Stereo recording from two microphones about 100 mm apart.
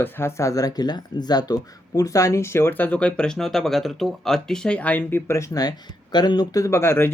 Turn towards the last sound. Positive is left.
turn(degrees=25)  # may be behind; listen again after turning